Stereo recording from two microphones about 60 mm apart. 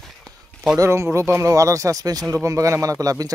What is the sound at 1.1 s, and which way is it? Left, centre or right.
Speech, right.